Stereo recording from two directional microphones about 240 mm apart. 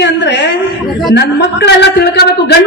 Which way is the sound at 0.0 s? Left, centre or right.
Left.